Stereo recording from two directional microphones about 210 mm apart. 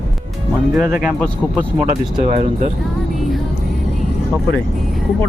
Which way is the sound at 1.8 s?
25° right (ahead or behind).